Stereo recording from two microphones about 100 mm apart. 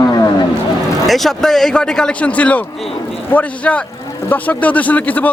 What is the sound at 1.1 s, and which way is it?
A man's voice, centre (ahead or behind).